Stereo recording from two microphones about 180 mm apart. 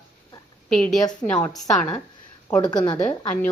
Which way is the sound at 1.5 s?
20° left (ahead or behind).